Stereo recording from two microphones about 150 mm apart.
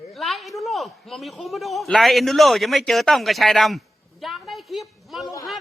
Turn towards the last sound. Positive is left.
turn(degrees=20)  # may be behind; listen again after turning